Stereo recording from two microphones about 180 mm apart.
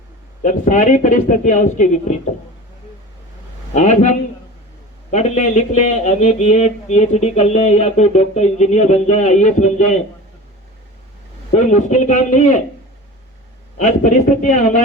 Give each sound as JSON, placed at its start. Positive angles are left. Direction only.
{"t": 0.4, "sound": "a man's voice", "side_deg": 45}
{"t": 3.8, "sound": "speech", "side_deg": 40}
{"t": 11.5, "sound": "speech", "side_deg": 40}
{"t": 13.7, "sound": "a man's voice", "side_deg": 45}